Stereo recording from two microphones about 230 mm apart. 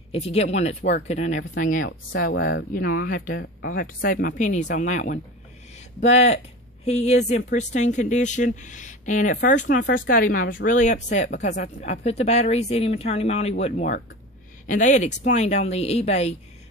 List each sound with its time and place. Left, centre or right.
0.1 s speech: left
1.9 s speech: left